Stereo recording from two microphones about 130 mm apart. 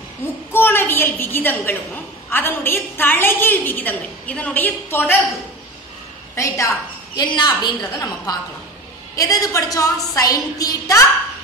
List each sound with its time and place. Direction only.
0.5 s a sound: 15° left (ahead or behind)
2.2 s a woman's voice: 15° left (ahead or behind)
6.3 s a woman's voice: 25° left (ahead or behind)
7.2 s a woman's voice: 35° left (ahead or behind)